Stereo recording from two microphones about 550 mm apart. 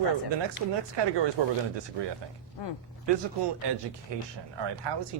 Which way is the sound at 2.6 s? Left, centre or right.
Left.